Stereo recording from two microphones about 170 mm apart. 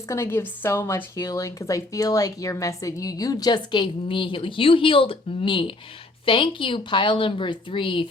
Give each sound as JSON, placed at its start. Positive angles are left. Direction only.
{"t": 0.1, "sound": "a woman's voice", "side_deg": 15}